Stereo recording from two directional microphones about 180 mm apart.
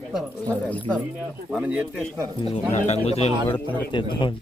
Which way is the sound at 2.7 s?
35° left (ahead or behind).